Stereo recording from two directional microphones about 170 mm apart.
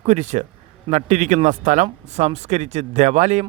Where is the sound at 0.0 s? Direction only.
40° right (ahead or behind).